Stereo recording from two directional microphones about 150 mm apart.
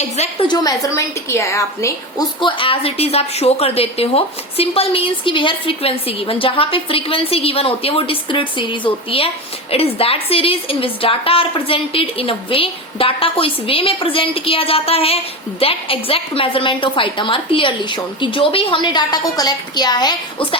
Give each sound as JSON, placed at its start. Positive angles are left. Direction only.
{"t": 0.4, "sound": "a woman's voice", "side_deg": 25}
{"t": 2.4, "sound": "a woman's voice", "side_deg": 35}